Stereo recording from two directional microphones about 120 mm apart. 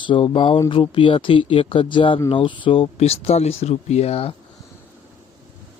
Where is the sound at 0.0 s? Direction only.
40° left (ahead or behind).